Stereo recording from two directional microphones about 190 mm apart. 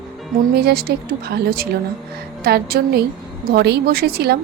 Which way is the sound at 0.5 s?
55° right (ahead or behind).